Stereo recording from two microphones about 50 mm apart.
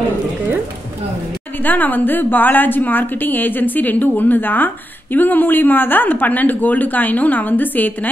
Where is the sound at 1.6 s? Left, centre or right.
Left.